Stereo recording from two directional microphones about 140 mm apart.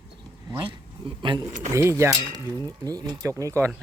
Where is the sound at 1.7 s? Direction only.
20° right (ahead or behind).